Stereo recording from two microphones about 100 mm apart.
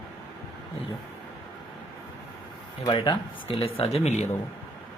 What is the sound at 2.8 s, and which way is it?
Speech, 50° left (ahead or behind).